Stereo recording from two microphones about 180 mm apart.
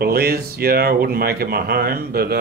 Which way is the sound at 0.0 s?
60° right (ahead or behind).